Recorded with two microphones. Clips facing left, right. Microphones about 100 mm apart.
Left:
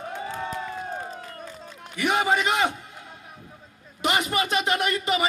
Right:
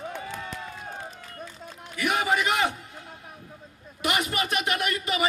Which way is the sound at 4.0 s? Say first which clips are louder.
Left 3 dB; 25° left (ahead or behind).